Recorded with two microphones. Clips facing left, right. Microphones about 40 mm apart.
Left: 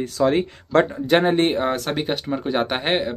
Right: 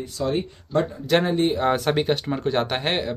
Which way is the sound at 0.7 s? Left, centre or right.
Left.